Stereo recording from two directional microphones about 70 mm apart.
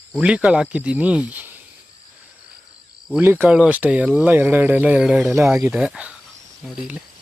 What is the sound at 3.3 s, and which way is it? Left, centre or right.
Speech, centre.